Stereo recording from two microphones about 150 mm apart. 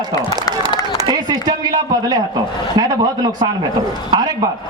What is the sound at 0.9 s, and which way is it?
A man's voice, 25° right (ahead or behind).